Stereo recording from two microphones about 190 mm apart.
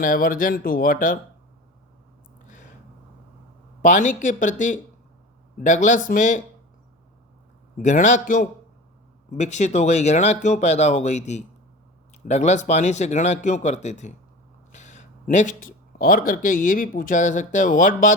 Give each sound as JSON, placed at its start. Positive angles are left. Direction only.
{"t": 0.0, "sound": "speech", "side_deg": 45}
{"t": 3.8, "sound": "a woman's voice", "side_deg": 40}
{"t": 7.8, "sound": "speech", "side_deg": 40}